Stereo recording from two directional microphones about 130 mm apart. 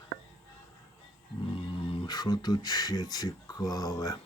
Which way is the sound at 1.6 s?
40° left (ahead or behind).